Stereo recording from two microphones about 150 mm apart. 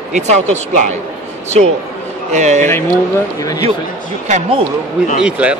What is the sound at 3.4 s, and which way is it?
Speech, 20° left (ahead or behind).